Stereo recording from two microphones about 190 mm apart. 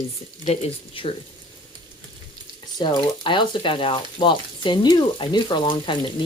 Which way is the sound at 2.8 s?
25° left (ahead or behind).